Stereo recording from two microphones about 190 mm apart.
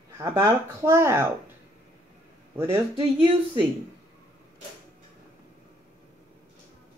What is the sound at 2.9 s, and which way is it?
Speech, 30° right (ahead or behind).